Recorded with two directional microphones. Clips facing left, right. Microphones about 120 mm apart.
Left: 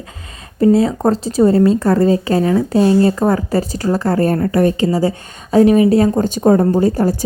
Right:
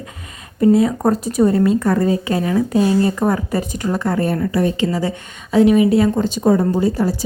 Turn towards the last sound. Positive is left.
turn(degrees=45)  # may be behind; listen again after turning